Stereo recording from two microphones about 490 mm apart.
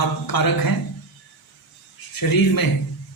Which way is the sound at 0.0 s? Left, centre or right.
Left.